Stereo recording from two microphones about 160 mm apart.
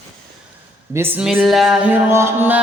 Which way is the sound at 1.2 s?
Centre (ahead or behind).